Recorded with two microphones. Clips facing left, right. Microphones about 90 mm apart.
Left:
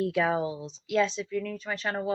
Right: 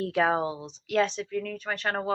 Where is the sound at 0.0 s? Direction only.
50° right (ahead or behind).